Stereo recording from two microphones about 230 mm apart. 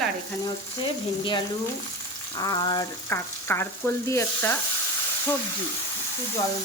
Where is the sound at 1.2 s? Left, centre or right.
Left.